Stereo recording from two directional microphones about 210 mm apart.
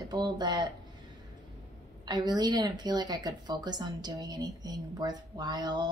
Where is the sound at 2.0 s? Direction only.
20° right (ahead or behind).